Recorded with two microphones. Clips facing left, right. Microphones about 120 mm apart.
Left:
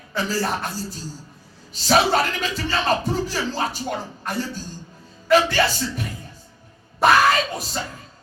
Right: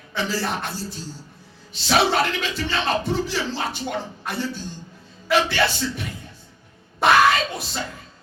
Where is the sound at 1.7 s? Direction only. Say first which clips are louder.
Left 1 dB; 40° left (ahead or behind).